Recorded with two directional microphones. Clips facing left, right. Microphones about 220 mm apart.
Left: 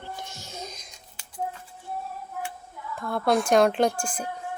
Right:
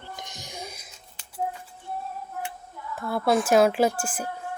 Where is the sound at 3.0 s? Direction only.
5° right (ahead or behind).